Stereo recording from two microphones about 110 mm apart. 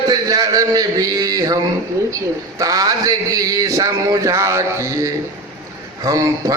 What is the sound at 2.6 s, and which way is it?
Mantra, 30° right (ahead or behind).